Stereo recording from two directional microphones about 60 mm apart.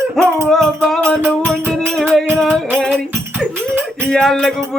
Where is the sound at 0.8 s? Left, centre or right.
Centre.